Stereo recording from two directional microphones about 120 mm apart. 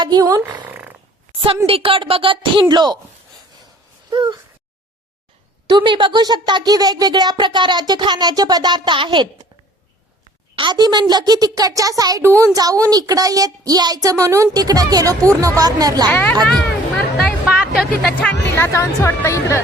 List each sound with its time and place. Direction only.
0.0 s speech: 35° right (ahead or behind)
0.7 s roar: 15° right (ahead or behind)
1.6 s a woman's voice: 50° right (ahead or behind)
4.1 s a woman's voice: 40° right (ahead or behind)
5.6 s a woman's voice: 40° right (ahead or behind)
10.5 s a woman's voice: 40° right (ahead or behind)
16.0 s a child's voice: 15° left (ahead or behind)
17.2 s music: centre (ahead or behind)
18.2 s speech: 15° left (ahead or behind)